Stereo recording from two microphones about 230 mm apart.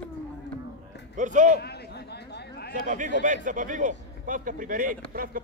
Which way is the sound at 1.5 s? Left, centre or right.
Left.